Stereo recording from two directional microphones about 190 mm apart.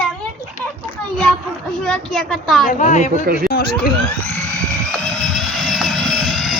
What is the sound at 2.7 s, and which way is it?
Speech, 40° left (ahead or behind).